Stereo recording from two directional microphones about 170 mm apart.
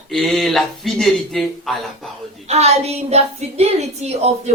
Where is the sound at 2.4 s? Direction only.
40° right (ahead or behind).